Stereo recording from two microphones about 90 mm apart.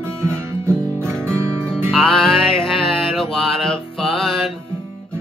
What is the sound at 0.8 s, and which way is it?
Music, 30° right (ahead or behind).